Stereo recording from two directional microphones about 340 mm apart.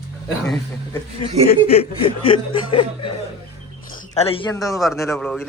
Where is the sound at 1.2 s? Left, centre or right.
Centre.